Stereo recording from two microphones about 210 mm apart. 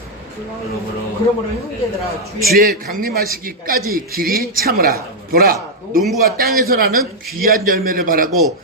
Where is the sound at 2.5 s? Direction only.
45° right (ahead or behind).